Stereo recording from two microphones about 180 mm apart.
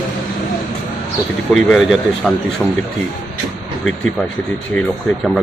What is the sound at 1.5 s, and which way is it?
Speech, centre (ahead or behind).